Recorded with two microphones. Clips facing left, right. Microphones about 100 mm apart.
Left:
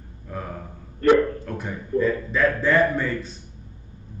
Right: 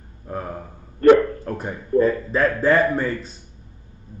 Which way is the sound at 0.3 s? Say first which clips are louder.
Right 3 dB; 40° right (ahead or behind).